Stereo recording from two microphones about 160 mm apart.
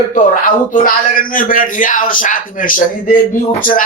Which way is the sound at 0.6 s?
60° left (ahead or behind).